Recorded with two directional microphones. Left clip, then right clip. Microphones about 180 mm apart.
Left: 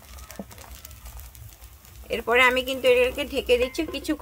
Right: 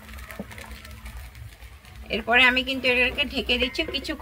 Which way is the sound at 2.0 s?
65° left (ahead or behind).